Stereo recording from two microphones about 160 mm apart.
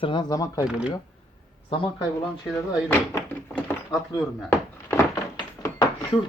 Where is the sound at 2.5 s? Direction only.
20° left (ahead or behind).